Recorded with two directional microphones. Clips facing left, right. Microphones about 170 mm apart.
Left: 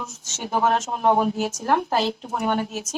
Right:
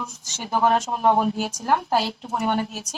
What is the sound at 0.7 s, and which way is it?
Speech, 5° right (ahead or behind).